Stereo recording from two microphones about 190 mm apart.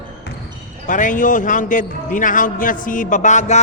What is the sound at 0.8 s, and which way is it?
A man's voice, 45° left (ahead or behind).